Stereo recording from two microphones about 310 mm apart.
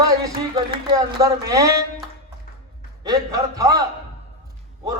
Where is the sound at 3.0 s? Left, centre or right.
Centre.